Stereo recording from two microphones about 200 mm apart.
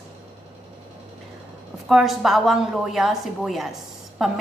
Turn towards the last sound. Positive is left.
turn(degrees=0)  # may be behind; listen again after turning